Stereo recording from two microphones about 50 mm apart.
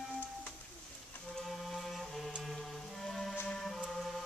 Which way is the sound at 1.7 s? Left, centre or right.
Centre.